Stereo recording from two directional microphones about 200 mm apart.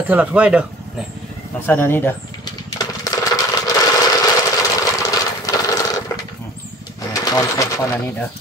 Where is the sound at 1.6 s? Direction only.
10° left (ahead or behind).